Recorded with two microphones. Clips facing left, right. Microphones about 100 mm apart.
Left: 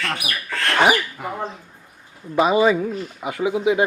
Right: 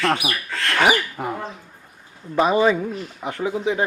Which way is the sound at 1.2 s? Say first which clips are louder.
Right 3 dB; 40° right (ahead or behind).